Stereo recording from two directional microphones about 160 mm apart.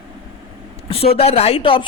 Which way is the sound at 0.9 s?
35° left (ahead or behind).